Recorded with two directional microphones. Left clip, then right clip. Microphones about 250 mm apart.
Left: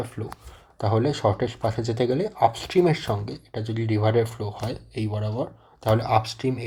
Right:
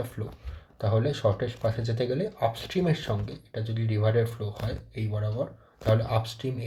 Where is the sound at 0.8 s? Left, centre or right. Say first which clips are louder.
Left 4 dB; left.